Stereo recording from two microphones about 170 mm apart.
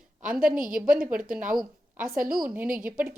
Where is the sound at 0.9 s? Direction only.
5° right (ahead or behind).